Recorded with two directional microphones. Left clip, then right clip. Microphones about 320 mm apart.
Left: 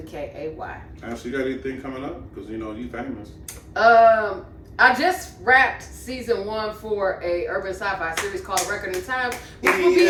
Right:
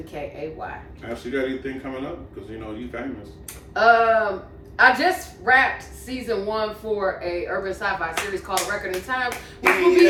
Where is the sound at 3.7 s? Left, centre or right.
Centre.